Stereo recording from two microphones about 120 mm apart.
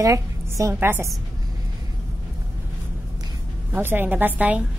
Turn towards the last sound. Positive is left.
turn(degrees=-10)  # may be behind; listen again after turning